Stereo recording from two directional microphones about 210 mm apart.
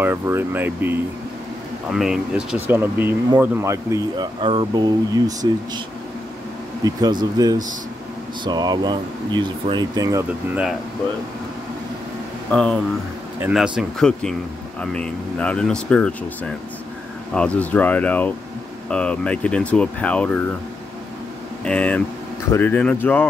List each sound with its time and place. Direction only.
0.0 s speech: 10° right (ahead or behind)
6.8 s speech: 20° right (ahead or behind)
12.4 s speech: 5° left (ahead or behind)
21.6 s speech: 5° left (ahead or behind)